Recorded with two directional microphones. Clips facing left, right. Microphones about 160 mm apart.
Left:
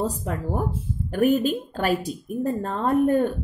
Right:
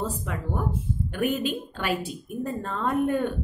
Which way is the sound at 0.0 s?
40° left (ahead or behind).